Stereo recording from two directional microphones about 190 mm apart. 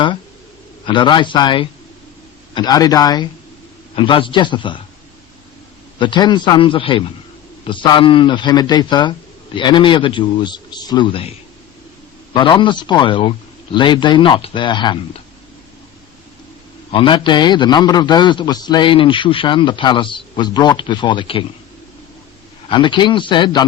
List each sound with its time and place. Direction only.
0.9 s a man's voice: 25° left (ahead or behind)
6.0 s a man's voice: 25° left (ahead or behind)
12.3 s a man's voice: 25° left (ahead or behind)
16.9 s a man's voice: 25° left (ahead or behind)
22.7 s a man's voice: 25° left (ahead or behind)